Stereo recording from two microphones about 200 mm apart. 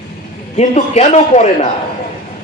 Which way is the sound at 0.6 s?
35° left (ahead or behind).